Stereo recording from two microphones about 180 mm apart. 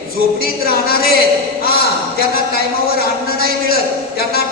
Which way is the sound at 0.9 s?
60° left (ahead or behind).